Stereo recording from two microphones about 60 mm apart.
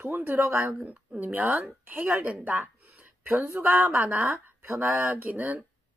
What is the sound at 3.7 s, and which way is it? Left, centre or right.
Speech, right.